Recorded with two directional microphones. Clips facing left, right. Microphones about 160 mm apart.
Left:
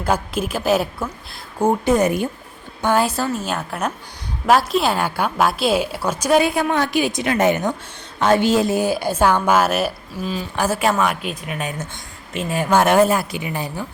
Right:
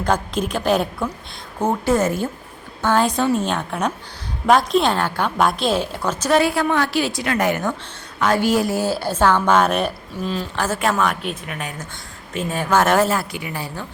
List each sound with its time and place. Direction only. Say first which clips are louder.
0.0 s a woman's voice: even; 5° left (ahead or behind)
1.6 s a woman's voice: left 2 dB; 15° left (ahead or behind)